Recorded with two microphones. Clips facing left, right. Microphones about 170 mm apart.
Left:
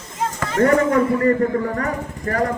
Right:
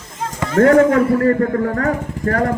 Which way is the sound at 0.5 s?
70° right (ahead or behind).